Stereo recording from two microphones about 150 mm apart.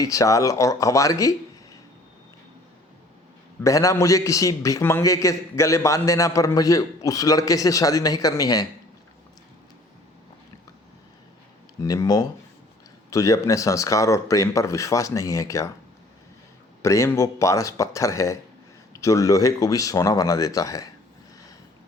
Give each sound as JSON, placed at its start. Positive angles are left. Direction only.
{"t": 0.0, "sound": "speech", "side_deg": 20}
{"t": 3.6, "sound": "a man's voice", "side_deg": 20}
{"t": 11.8, "sound": "a man's voice", "side_deg": 25}
{"t": 16.8, "sound": "a man's voice", "side_deg": 20}